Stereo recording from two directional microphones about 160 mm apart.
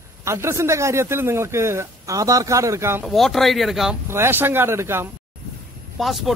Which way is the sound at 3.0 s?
Centre (ahead or behind).